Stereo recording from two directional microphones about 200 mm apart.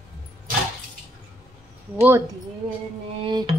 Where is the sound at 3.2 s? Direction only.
25° right (ahead or behind).